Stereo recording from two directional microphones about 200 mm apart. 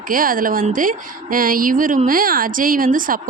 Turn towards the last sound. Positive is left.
turn(degrees=-45)  # may be behind; listen again after turning